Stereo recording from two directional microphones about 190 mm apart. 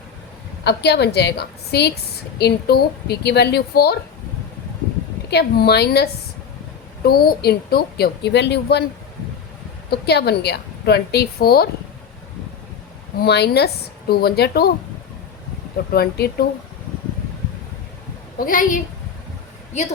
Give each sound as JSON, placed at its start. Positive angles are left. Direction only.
{"t": 0.6, "sound": "a woman's voice", "side_deg": 60}
{"t": 5.3, "sound": "a woman's voice", "side_deg": 55}
{"t": 9.9, "sound": "a woman's voice", "side_deg": 60}
{"t": 13.2, "sound": "a woman's voice", "side_deg": 60}
{"t": 15.9, "sound": "speech", "side_deg": 55}
{"t": 18.3, "sound": "speech", "side_deg": 45}